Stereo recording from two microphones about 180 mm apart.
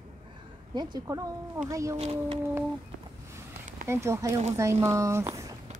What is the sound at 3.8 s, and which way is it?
Speech, 15° right (ahead or behind).